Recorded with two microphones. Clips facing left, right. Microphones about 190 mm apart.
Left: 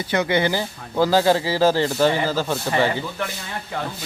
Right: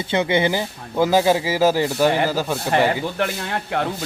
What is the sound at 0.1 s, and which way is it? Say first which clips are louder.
Speech: right 1 dB; 20° right (ahead or behind).